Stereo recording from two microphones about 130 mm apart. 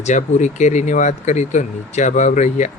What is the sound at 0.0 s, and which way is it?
Speech, 70° left (ahead or behind).